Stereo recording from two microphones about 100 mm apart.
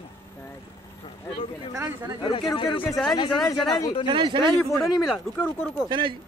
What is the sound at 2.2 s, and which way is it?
Speech, 55° left (ahead or behind).